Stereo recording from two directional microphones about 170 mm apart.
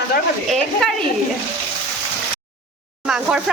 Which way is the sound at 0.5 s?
Centre (ahead or behind).